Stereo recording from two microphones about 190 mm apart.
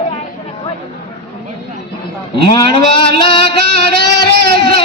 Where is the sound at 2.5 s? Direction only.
25° left (ahead or behind).